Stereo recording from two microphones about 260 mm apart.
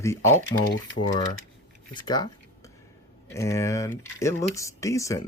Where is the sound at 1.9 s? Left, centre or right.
Centre.